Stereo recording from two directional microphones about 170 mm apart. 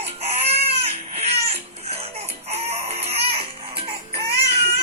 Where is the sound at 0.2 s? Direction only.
40° right (ahead or behind).